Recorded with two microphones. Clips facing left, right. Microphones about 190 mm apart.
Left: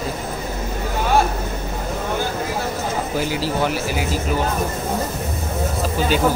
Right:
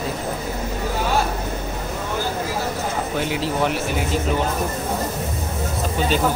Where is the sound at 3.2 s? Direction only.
Centre (ahead or behind).